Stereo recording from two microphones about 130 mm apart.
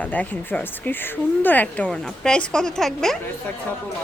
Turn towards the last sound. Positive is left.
turn(degrees=5)  # may be behind; listen again after turning